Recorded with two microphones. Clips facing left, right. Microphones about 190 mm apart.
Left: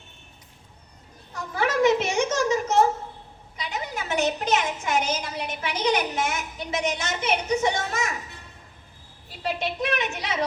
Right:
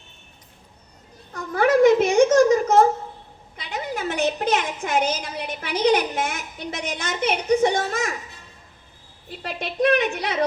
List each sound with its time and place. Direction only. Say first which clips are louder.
1.5 s a sound: right 6 dB; 55° right (ahead or behind)
3.6 s a woman's voice: right 4 dB; 55° right (ahead or behind)
9.8 s a woman's voice: right 11 dB; 55° right (ahead or behind)